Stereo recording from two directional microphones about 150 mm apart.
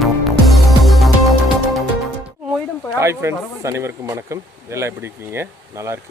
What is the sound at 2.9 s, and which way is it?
Speech, 20° right (ahead or behind).